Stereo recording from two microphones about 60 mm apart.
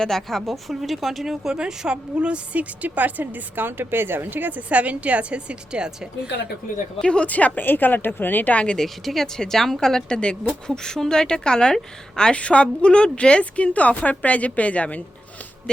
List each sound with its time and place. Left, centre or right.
0.0 s speech: centre
7.0 s a woman's voice: centre
8.8 s a woman's voice: centre; by 15.0 s left